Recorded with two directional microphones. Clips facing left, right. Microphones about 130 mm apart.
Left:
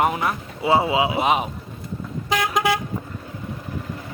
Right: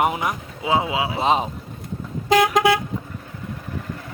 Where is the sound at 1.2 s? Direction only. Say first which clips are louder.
Right 1 dB; 30° right (ahead or behind).